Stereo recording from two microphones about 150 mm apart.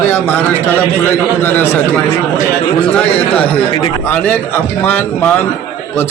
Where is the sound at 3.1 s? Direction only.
10° left (ahead or behind).